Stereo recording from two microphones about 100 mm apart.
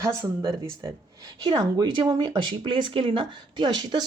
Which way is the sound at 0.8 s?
40° right (ahead or behind).